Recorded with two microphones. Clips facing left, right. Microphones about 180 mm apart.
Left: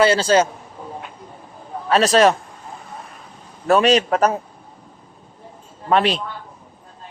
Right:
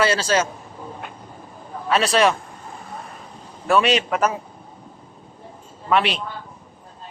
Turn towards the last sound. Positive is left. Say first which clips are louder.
# left 3 dB
turn(degrees=35)  # may be behind; listen again after turning